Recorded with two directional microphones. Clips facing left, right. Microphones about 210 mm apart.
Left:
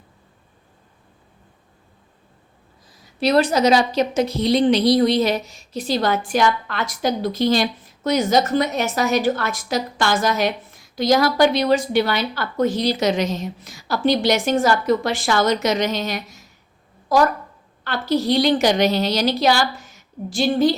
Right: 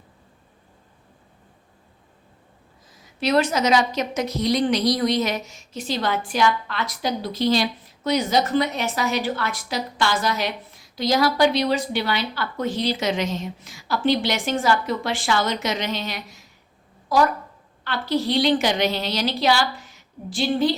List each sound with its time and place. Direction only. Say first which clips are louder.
3.2 s a woman's voice: left 4 dB; 35° left (ahead or behind)